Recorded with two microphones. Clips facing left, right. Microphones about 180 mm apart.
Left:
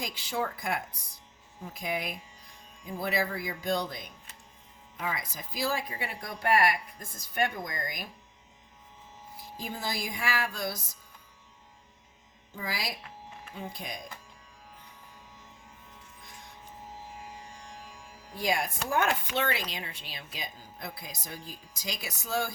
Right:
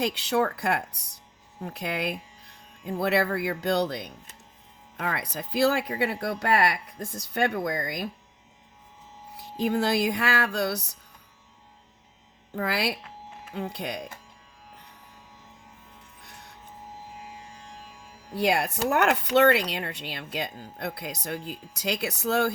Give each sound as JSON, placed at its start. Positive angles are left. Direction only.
{"t": 0.0, "sound": "speech", "side_deg": -70}
{"t": 9.3, "sound": "speech", "side_deg": -70}
{"t": 12.5, "sound": "speech", "side_deg": -70}
{"t": 18.3, "sound": "speech", "side_deg": -70}